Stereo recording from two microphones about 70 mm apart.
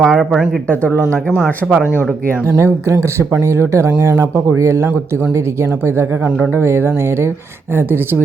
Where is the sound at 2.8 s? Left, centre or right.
Right.